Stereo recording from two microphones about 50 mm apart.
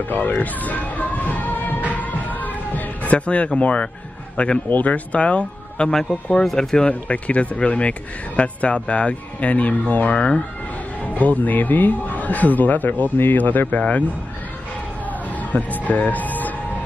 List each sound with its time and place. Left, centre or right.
0.1 s speech: left
1.9 s music: left
4.6 s speech: left
5.9 s speech: centre
6.8 s speech: left
10.1 s speech: centre
11.1 s speech: left
15.0 s music: left